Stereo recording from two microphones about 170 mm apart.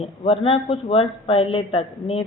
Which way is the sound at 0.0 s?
35° left (ahead or behind).